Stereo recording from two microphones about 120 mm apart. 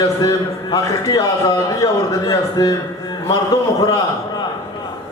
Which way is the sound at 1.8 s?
25° left (ahead or behind).